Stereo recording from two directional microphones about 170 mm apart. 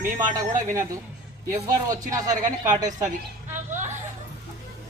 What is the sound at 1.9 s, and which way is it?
Speech, 20° right (ahead or behind).